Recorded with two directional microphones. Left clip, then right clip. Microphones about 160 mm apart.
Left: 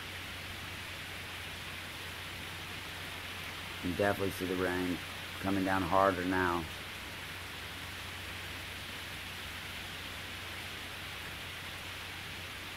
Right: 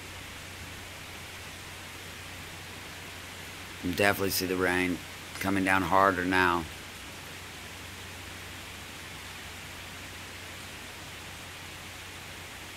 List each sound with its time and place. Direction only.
4.0 s speech: 25° right (ahead or behind)